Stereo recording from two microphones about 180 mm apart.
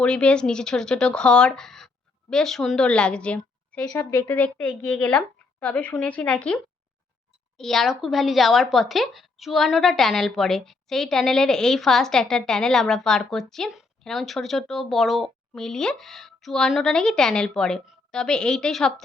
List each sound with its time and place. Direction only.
0.0 s a woman's voice: 5° left (ahead or behind)